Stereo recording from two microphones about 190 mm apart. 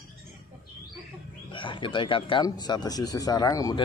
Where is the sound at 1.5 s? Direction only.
25° left (ahead or behind).